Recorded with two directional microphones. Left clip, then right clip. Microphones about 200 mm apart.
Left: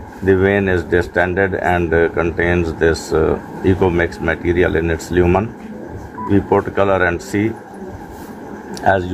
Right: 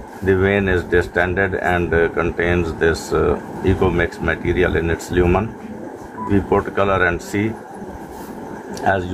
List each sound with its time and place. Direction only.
0.2 s speech: 20° left (ahead or behind)
8.8 s speech: 25° left (ahead or behind)